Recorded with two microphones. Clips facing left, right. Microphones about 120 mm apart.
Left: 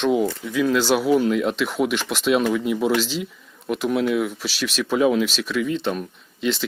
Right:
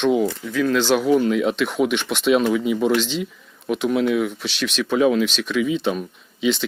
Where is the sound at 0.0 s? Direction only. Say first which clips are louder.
Right 1 dB; centre (ahead or behind).